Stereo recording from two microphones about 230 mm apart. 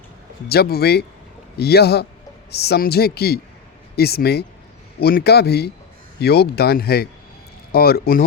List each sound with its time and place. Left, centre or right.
0.4 s a man's voice: left